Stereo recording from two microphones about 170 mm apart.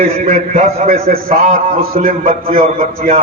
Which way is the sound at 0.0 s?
40° right (ahead or behind).